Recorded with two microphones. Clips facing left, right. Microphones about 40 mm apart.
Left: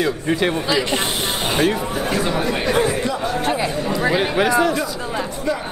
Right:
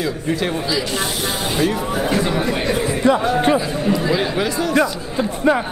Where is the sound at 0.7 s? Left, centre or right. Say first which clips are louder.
Left 2 dB; left.